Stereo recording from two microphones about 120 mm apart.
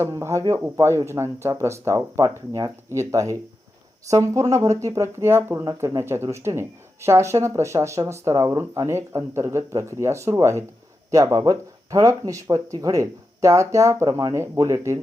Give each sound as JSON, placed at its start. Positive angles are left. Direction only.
{"t": 0.0, "sound": "speech", "side_deg": -25}